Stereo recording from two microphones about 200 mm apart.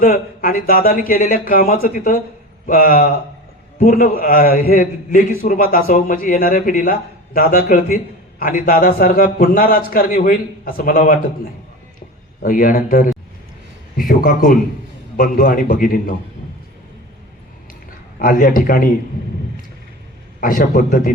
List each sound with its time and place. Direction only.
0.0 s a man's voice: 45° left (ahead or behind)
12.4 s a man's voice: 45° left (ahead or behind)
18.2 s a man's voice: 45° left (ahead or behind)
20.4 s a man's voice: 40° left (ahead or behind)